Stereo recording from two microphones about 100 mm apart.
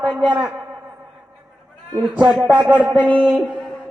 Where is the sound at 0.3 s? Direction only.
15° right (ahead or behind).